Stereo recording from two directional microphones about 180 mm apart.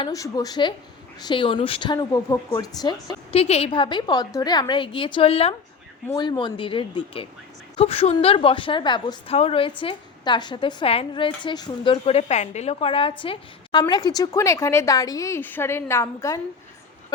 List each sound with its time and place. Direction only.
0.0 s a woman's voice: 20° left (ahead or behind)
3.4 s a woman's voice: 35° left (ahead or behind); by 16.4 s 15° left (ahead or behind)